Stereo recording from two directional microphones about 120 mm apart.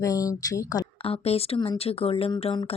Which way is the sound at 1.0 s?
50° left (ahead or behind).